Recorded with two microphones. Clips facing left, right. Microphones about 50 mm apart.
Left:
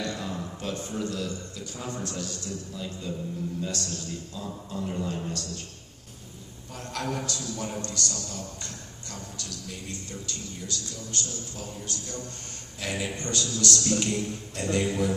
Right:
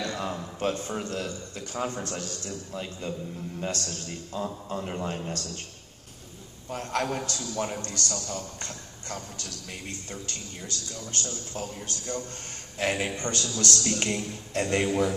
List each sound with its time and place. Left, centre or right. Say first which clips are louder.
0.0 s a man's voice: right 1 dB; right
6.7 s a man's voice: right 4 dB; right